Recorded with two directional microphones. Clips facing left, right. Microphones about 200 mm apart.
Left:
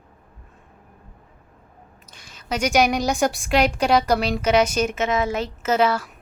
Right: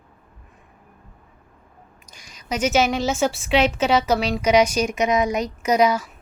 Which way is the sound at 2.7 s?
15° left (ahead or behind).